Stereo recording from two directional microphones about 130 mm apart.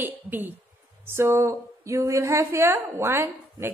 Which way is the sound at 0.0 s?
15° right (ahead or behind).